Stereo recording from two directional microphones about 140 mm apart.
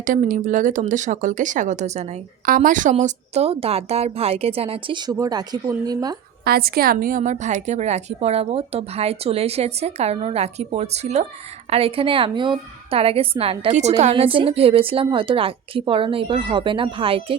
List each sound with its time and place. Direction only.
0.0 s speech: 75° right (ahead or behind); by 2.0 s 55° right (ahead or behind)
2.5 s a woman's voice: 70° right (ahead or behind)
2.9 s a woman's voice: 50° right (ahead or behind); by 6.1 s 25° right (ahead or behind)
6.4 s a woman's voice: 90° right; by 17.3 s 40° right (ahead or behind)